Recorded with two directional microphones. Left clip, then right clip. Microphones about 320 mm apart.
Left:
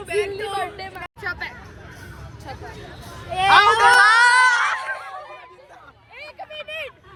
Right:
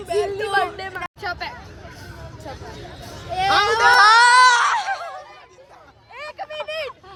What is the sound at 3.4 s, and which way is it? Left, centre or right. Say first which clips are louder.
Speech: left 4 dB; left.